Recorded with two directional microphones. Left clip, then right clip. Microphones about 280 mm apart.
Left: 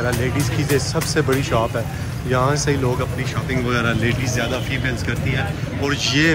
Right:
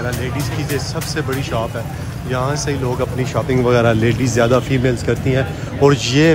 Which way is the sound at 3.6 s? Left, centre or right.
Right.